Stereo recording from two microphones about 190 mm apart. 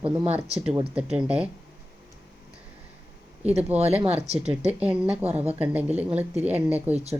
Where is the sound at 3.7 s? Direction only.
35° right (ahead or behind).